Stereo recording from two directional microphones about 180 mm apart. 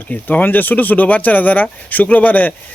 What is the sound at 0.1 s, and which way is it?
Speech, 10° left (ahead or behind).